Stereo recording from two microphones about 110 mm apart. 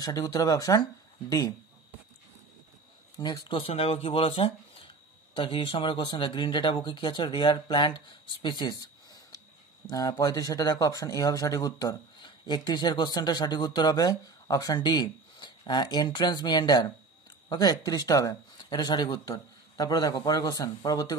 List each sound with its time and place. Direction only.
0.0 s speech: 35° left (ahead or behind)
3.2 s speech: 40° left (ahead or behind)
3.5 s speech: 60° left (ahead or behind); by 21.2 s 35° left (ahead or behind)